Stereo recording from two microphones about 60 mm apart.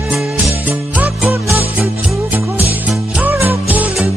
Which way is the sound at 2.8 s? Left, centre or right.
Right.